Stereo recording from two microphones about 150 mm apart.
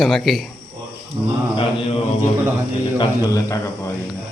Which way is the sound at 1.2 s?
35° right (ahead or behind).